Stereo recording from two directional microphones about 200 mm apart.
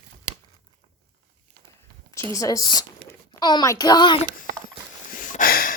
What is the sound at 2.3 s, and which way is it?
A woman's voice, 15° left (ahead or behind).